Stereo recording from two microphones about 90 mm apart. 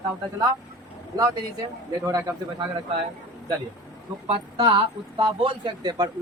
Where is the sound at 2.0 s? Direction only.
40° right (ahead or behind).